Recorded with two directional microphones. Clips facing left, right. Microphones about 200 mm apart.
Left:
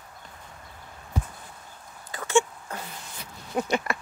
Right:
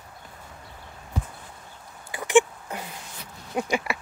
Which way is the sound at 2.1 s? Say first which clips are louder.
Right 4 dB; 15° right (ahead or behind).